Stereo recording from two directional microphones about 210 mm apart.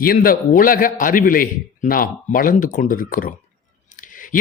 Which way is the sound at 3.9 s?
40° left (ahead or behind).